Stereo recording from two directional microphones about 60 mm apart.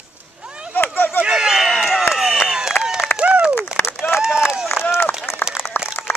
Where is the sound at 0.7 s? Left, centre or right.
Left.